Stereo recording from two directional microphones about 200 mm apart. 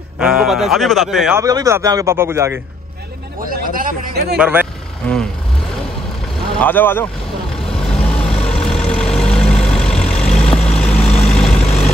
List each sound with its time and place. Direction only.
0.2 s speech: 5° right (ahead or behind)
1.4 s a man's voice: 15° right (ahead or behind)
3.3 s a man's voice: 45° right (ahead or behind)
4.4 s speech: 10° right (ahead or behind)
5.0 s vehicle: 5° left (ahead or behind)
6.6 s speech: 10° left (ahead or behind)
7.6 s vehicle: 5° left (ahead or behind)
11.1 s vehicle: 30° left (ahead or behind)
11.4 s vehicle: 5° left (ahead or behind)